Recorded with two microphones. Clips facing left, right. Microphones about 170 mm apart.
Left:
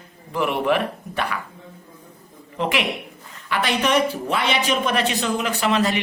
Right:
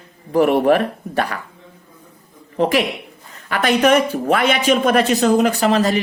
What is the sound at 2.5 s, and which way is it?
Speech, 40° right (ahead or behind).